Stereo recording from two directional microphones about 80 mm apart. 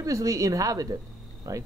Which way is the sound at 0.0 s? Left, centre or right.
Right.